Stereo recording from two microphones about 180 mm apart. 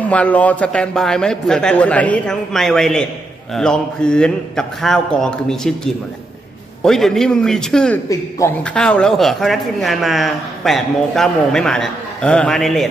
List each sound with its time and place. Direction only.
0.1 s speech: 5° left (ahead or behind)
8.1 s a man's voice: 15° left (ahead or behind)
8.7 s speech: 5° left (ahead or behind)